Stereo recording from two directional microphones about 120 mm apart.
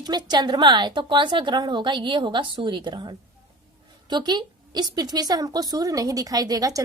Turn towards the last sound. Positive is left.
turn(degrees=-30)  # may be behind; listen again after turning